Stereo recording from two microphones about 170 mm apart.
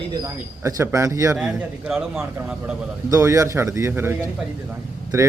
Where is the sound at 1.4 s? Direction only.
5° right (ahead or behind).